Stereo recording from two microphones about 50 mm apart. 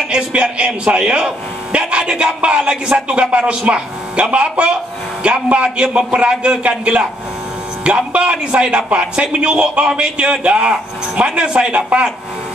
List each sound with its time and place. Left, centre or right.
0.1 s a man's voice: right